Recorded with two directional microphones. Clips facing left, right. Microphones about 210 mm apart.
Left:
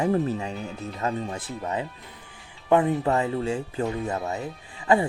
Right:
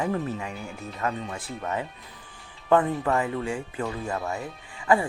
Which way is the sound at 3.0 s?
25° left (ahead or behind).